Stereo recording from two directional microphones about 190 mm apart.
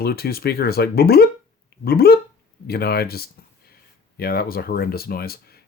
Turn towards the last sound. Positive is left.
turn(degrees=55)  # may be behind; listen again after turning